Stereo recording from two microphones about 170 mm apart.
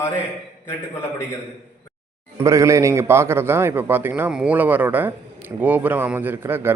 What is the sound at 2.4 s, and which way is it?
A man's voice, 20° right (ahead or behind).